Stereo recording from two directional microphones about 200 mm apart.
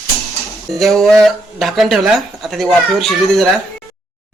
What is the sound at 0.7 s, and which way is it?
Speech, centre (ahead or behind).